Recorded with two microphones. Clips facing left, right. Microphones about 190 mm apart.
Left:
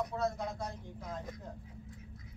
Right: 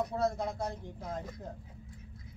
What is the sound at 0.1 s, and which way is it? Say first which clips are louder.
Speech: right 3 dB; 35° right (ahead or behind).